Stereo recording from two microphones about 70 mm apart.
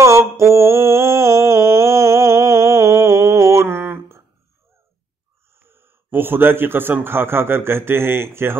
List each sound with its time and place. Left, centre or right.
0.0 s mantra: right
5.6 s a man's voice: right